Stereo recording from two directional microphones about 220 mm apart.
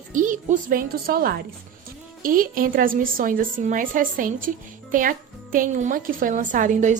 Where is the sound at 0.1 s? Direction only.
35° right (ahead or behind).